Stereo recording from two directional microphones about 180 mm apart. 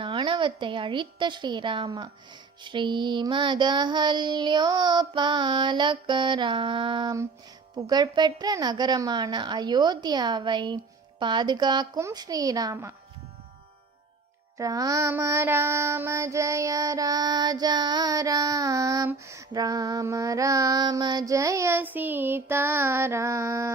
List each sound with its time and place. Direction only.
0.0 s a woman's voice: 30° right (ahead or behind)
2.6 s child singing: 25° right (ahead or behind)
14.6 s child singing: 20° right (ahead or behind)